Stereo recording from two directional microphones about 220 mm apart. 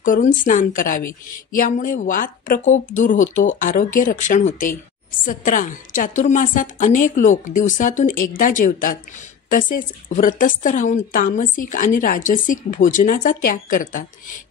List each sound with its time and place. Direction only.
0.0 s a woman's voice: 35° left (ahead or behind)